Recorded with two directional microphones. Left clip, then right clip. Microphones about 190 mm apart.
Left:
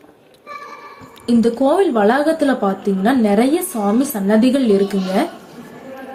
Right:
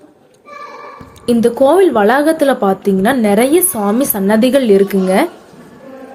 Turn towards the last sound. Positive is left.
turn(degrees=-55)  # may be behind; listen again after turning